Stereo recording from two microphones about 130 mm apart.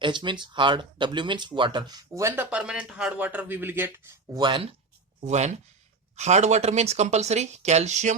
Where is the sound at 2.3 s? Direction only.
10° right (ahead or behind).